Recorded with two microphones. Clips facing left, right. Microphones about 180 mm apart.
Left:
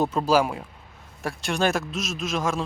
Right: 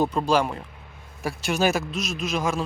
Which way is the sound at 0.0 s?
Centre (ahead or behind).